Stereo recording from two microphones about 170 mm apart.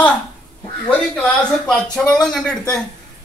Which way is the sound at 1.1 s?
5° left (ahead or behind).